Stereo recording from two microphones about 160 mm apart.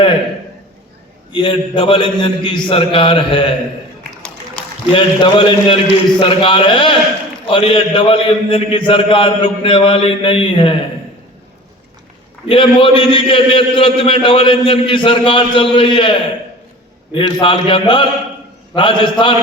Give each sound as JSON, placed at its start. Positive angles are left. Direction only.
{"t": 1.3, "sound": "a man's voice", "side_deg": 30}
{"t": 4.9, "sound": "a man's voice", "side_deg": 30}
{"t": 12.5, "sound": "a man's voice", "side_deg": 30}
{"t": 17.2, "sound": "a man's voice", "side_deg": 30}